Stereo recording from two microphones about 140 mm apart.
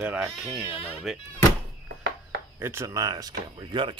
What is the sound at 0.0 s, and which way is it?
Speech, 10° right (ahead or behind).